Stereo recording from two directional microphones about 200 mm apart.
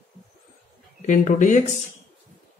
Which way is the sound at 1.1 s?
40° left (ahead or behind).